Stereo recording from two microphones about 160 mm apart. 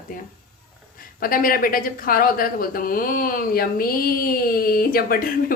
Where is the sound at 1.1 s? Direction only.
65° left (ahead or behind).